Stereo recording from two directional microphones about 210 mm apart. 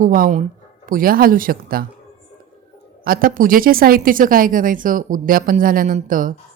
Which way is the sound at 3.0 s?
45° right (ahead or behind).